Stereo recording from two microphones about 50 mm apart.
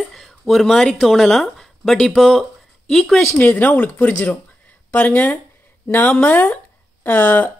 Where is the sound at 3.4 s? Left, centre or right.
Left.